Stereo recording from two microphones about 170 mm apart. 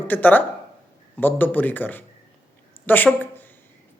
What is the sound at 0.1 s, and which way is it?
A woman's voice, 10° left (ahead or behind).